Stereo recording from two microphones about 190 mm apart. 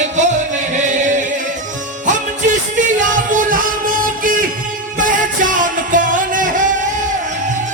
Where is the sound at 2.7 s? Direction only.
45° right (ahead or behind).